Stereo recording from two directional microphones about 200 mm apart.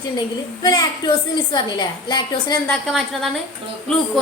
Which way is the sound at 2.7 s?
Centre (ahead or behind).